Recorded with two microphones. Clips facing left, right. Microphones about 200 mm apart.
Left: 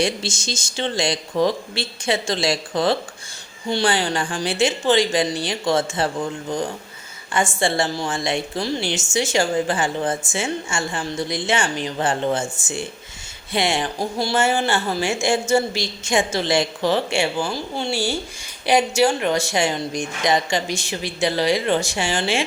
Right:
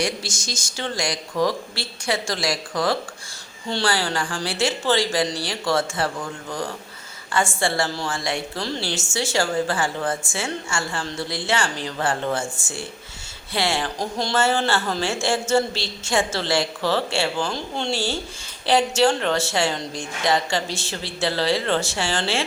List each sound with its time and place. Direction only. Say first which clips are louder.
0.0 s a woman's voice: left 3 dB; 25° left (ahead or behind)